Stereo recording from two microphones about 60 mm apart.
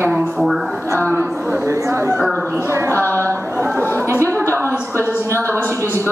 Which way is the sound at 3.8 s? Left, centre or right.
Left.